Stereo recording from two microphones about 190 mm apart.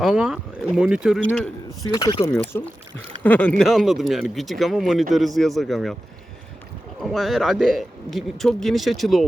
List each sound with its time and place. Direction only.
0.0 s speech: 5° right (ahead or behind)
1.8 s speech: 20° left (ahead or behind)
2.3 s speech: 5° left (ahead or behind)
7.0 s speech: centre (ahead or behind)